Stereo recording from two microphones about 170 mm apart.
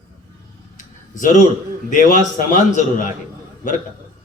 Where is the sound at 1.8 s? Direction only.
50° left (ahead or behind).